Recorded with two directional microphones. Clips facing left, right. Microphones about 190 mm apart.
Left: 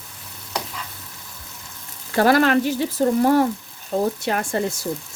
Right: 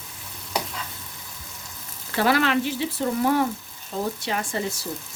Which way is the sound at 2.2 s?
45° left (ahead or behind).